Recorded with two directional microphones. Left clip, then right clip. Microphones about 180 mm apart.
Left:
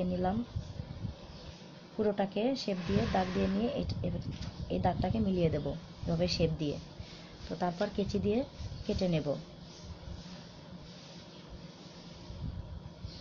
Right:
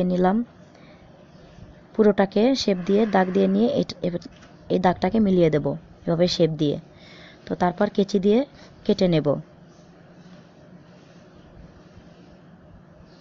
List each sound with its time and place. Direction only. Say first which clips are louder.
0.0 s speech: right 12 dB; 50° right (ahead or behind)
2.0 s speech: right 13 dB; 50° right (ahead or behind)